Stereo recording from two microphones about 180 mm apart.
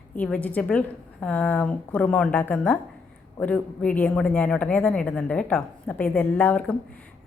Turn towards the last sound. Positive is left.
turn(degrees=10)  # may be behind; listen again after turning